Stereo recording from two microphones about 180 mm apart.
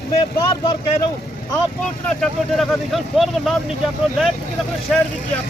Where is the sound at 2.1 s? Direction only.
Centre (ahead or behind).